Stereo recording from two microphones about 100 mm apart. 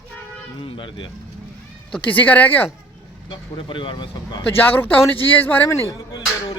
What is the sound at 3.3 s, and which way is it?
Speech, 55° left (ahead or behind).